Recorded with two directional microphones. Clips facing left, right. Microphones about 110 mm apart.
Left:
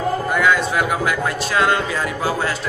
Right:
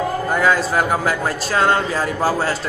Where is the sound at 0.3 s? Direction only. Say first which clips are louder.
Right 1 dB; 35° right (ahead or behind).